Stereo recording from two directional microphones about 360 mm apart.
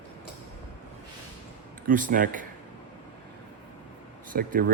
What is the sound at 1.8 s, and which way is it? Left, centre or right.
Speech, right.